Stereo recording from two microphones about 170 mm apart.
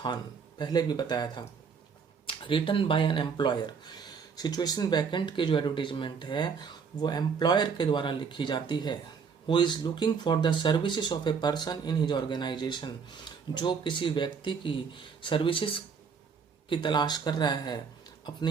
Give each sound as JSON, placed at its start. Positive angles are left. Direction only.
{"t": 0.6, "sound": "speech", "side_deg": 25}